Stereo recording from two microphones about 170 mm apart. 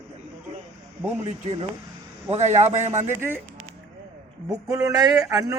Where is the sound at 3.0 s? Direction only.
15° right (ahead or behind).